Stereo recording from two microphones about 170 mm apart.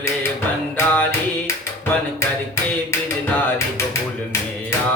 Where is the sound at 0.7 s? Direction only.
10° left (ahead or behind).